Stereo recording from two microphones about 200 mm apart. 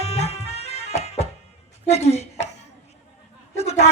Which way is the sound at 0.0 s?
30° left (ahead or behind).